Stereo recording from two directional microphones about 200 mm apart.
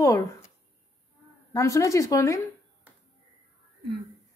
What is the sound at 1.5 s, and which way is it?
Speech, 15° left (ahead or behind).